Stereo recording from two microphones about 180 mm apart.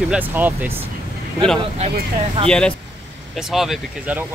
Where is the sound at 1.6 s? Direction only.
35° right (ahead or behind).